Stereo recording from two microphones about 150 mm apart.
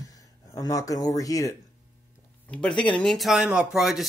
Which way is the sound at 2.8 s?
5° left (ahead or behind).